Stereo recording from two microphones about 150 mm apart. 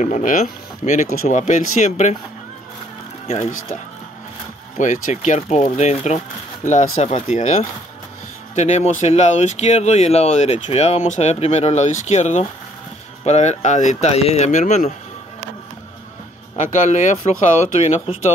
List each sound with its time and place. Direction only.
0.0 s speech: 60° left (ahead or behind)
3.3 s speech: 45° left (ahead or behind)
4.7 s speech: 55° left (ahead or behind)
16.5 s speech: 55° left (ahead or behind)